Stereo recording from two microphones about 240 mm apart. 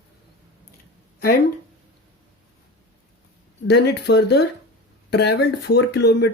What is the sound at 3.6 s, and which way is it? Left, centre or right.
Speech, left.